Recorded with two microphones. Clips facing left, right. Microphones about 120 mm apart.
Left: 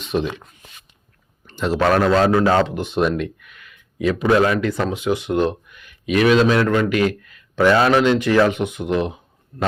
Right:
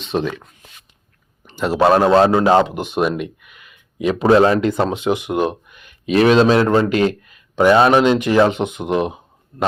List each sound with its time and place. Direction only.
0.2 s speech: 45° right (ahead or behind)
1.5 s speech: 10° right (ahead or behind)
1.8 s a man's voice: 25° right (ahead or behind)
4.2 s a man's voice: 30° right (ahead or behind)
5.1 s speech: 10° right (ahead or behind)
5.6 s a man's voice: 20° right (ahead or behind)
7.3 s speech: 20° right (ahead or behind)